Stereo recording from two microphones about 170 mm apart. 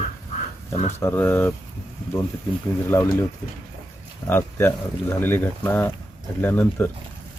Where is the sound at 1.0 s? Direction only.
10° left (ahead or behind).